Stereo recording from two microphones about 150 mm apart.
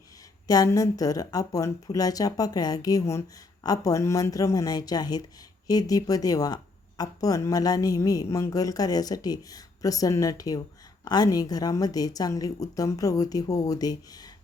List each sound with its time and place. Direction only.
0.4 s a woman's voice: 25° left (ahead or behind)